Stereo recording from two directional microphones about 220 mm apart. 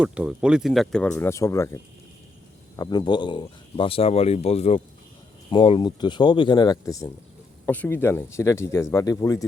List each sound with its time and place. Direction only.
0.0 s speech: 5° right (ahead or behind)
1.1 s speech: 15° left (ahead or behind)